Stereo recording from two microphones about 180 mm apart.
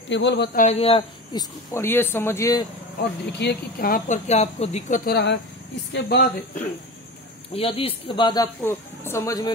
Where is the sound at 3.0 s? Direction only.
65° left (ahead or behind).